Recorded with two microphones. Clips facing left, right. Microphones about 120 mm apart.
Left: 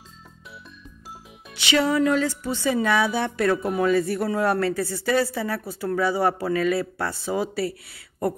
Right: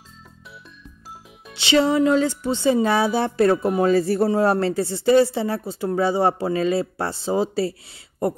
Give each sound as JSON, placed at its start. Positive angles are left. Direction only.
{"t": 1.5, "sound": "speech", "side_deg": -30}